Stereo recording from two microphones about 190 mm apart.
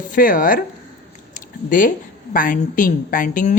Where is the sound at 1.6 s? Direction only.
45° left (ahead or behind).